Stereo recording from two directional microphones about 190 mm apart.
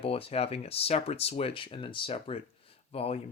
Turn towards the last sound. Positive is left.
turn(degrees=30)  # may be behind; listen again after turning